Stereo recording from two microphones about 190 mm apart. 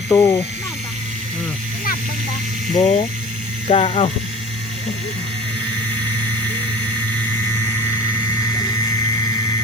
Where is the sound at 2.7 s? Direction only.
35° left (ahead or behind).